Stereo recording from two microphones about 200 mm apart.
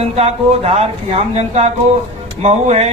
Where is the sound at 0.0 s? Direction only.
30° right (ahead or behind).